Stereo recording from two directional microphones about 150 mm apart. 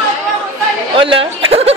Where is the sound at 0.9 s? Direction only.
35° right (ahead or behind).